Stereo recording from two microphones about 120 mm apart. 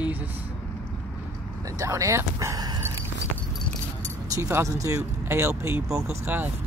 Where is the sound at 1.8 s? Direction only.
25° right (ahead or behind).